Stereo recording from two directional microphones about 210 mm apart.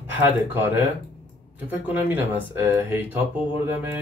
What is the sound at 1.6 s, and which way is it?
Speech, 10° right (ahead or behind).